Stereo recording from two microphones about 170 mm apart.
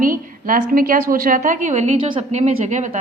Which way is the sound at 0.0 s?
55° right (ahead or behind).